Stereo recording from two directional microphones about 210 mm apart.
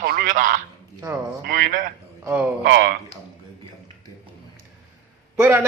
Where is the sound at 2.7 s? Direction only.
45° right (ahead or behind).